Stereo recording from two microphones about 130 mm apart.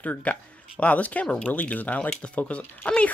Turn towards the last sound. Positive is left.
turn(degrees=10)  # may be behind; listen again after turning